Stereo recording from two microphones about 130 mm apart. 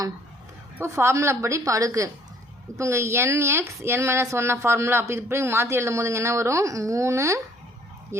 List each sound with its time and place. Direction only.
0.8 s a woman's voice: 20° right (ahead or behind)